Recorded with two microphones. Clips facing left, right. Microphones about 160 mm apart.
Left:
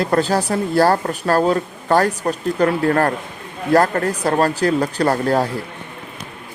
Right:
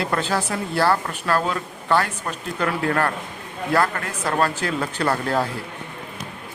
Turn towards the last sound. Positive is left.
turn(degrees=40)  # may be behind; listen again after turning